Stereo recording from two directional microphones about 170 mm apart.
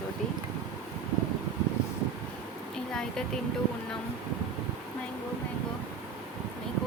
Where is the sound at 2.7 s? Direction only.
5° left (ahead or behind).